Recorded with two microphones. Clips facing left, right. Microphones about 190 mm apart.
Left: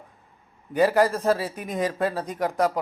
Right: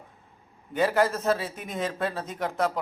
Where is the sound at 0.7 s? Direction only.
5° left (ahead or behind).